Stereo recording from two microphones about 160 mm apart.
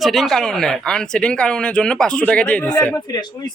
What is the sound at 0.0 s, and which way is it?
Speech, centre (ahead or behind).